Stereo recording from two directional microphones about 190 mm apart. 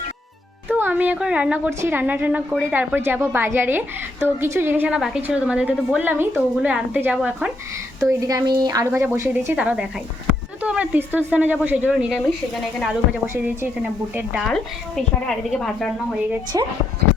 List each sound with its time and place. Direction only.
0.7 s a woman's voice: 10° right (ahead or behind)
8.0 s a woman's voice: 15° right (ahead or behind)
13.2 s a woman's voice: 15° right (ahead or behind)
14.4 s a woman's voice: 5° left (ahead or behind)
16.5 s speech: 20° right (ahead or behind)